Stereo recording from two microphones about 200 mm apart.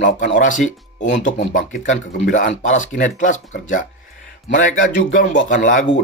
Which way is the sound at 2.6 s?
40° left (ahead or behind).